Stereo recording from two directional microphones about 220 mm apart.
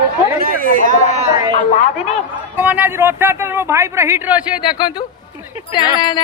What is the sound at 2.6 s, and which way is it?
Speech, 5° right (ahead or behind).